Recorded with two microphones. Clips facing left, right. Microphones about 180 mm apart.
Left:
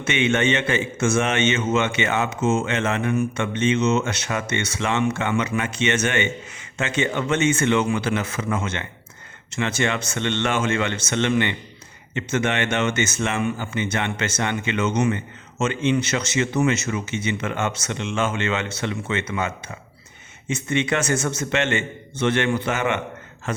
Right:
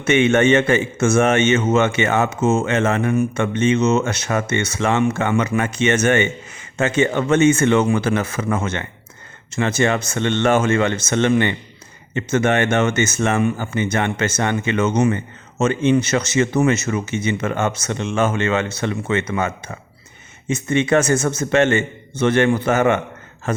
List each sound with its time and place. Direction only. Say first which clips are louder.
0.0 s a man's voice: right 6 dB; 50° right (ahead or behind)